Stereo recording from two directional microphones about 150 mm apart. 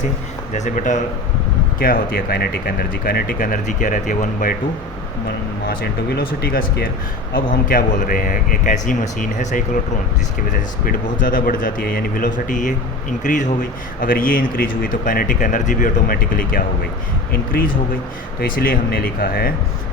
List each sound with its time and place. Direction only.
0.5 s a man's voice: 55° left (ahead or behind)
1.8 s a man's voice: 80° left; by 4.5 s 60° left (ahead or behind)
5.6 s speech: 90° left
7.3 s a man's voice: 70° left (ahead or behind)
10.8 s a man's voice: 65° left (ahead or behind); by 19.5 s 90° left